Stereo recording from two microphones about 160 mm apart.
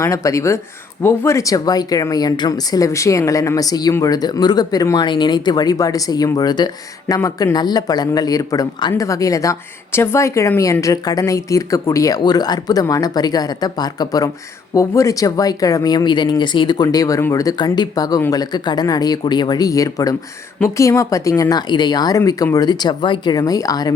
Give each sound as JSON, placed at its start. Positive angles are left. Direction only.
{"t": 0.0, "sound": "speech", "side_deg": 20}